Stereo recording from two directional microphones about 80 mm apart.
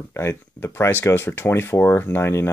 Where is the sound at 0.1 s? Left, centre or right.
Left.